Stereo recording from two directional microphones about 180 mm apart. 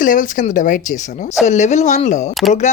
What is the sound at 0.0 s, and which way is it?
Speech, 45° left (ahead or behind).